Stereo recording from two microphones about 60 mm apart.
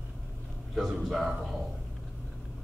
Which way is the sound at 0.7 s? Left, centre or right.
Centre.